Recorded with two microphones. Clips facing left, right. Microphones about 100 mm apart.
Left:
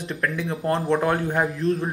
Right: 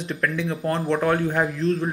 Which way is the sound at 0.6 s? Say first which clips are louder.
Left 1 dB; 30° left (ahead or behind).